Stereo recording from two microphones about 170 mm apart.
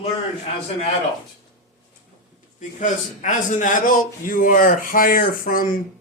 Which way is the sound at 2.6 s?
45° left (ahead or behind).